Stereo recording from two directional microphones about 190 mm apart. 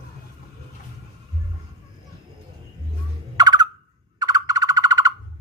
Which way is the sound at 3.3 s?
20° right (ahead or behind).